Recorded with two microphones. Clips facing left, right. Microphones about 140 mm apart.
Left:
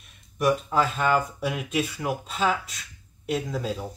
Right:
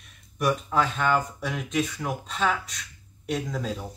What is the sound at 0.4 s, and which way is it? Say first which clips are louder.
Speech: left 2 dB; centre (ahead or behind).